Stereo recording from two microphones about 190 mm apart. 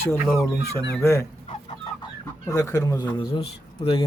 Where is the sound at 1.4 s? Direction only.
25° left (ahead or behind).